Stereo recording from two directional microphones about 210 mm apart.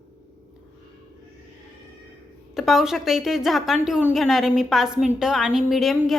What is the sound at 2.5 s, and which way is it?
A woman's voice, centre (ahead or behind).